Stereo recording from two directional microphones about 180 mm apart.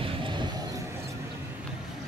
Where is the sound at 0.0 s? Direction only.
30° right (ahead or behind).